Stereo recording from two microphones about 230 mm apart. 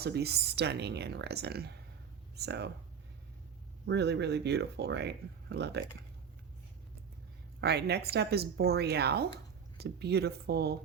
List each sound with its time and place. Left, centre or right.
0.0 s speech: right
3.8 s speech: right
7.6 s speech: right